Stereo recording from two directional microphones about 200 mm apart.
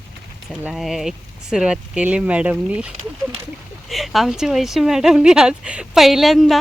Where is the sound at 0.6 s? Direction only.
Centre (ahead or behind).